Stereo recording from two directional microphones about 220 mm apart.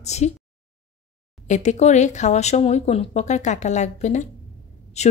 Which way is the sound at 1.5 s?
30° left (ahead or behind).